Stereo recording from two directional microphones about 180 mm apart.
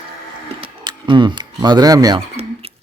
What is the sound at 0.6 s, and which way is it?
Speech, 25° right (ahead or behind).